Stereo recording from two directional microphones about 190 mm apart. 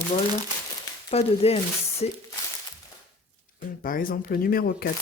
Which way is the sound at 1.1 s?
30° left (ahead or behind).